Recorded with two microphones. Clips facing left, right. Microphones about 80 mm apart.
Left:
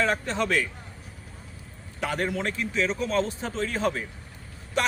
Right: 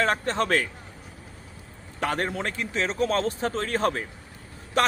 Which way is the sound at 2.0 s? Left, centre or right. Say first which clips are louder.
Right 1 dB; right.